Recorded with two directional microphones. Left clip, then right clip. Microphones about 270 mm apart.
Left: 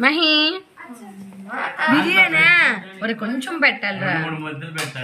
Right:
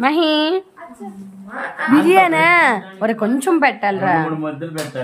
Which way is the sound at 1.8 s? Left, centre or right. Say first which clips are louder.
Right 3 dB; centre.